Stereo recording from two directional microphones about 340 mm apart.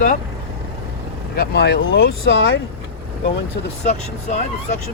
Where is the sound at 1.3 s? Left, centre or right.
Left.